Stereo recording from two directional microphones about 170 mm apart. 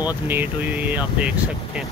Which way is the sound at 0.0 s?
10° right (ahead or behind).